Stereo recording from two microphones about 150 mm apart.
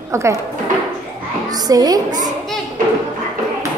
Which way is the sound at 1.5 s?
25° right (ahead or behind).